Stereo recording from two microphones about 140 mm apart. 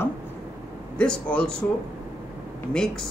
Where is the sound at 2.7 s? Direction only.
5° left (ahead or behind).